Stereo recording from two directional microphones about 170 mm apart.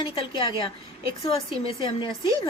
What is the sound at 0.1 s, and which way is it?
A woman's voice, 30° left (ahead or behind).